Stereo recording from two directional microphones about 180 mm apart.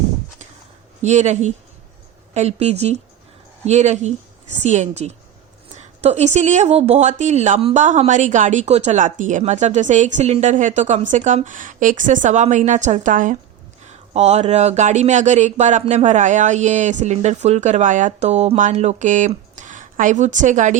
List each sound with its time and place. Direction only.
1.0 s speech: 40° right (ahead or behind)